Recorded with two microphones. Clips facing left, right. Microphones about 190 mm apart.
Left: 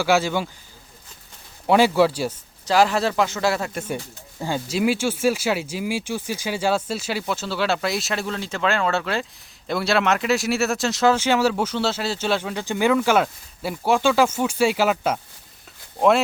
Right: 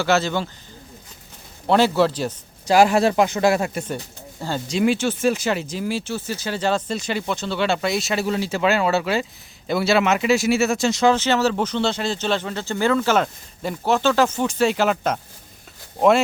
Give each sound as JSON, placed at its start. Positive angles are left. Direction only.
{"t": 0.0, "sound": "speech", "side_deg": 10}
{"t": 1.6, "sound": "a man's voice", "side_deg": 10}
{"t": 2.6, "sound": "speech", "side_deg": -15}
{"t": 3.8, "sound": "speech", "side_deg": 5}